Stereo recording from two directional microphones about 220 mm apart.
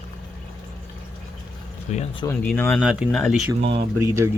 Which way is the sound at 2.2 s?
10° left (ahead or behind).